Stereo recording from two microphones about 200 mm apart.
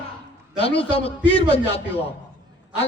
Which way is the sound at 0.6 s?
30° left (ahead or behind).